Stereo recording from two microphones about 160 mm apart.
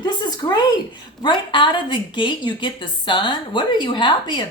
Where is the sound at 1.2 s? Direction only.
30° left (ahead or behind).